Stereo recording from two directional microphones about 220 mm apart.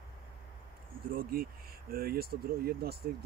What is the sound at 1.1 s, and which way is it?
Speech, 40° right (ahead or behind).